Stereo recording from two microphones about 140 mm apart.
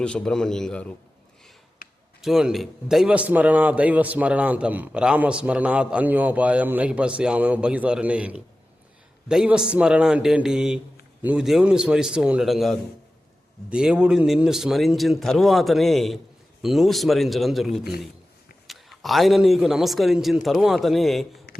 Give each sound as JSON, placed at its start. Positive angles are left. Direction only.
{"t": 0.0, "sound": "a man's voice", "side_deg": 5}
{"t": 1.8, "sound": "basketball bounce", "side_deg": 90}
{"t": 2.2, "sound": "a man's voice", "side_deg": 0}